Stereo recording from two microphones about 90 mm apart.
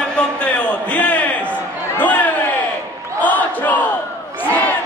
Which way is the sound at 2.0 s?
20° left (ahead or behind).